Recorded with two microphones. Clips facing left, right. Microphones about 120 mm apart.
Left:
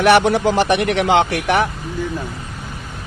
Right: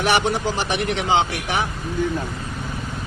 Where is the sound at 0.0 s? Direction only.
60° left (ahead or behind).